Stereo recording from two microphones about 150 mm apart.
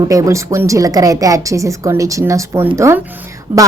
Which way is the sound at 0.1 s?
20° right (ahead or behind).